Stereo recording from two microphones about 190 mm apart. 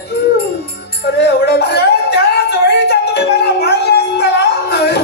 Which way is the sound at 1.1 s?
60° left (ahead or behind).